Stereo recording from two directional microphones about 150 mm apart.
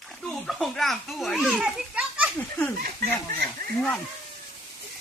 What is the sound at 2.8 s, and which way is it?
Speech, 90° right.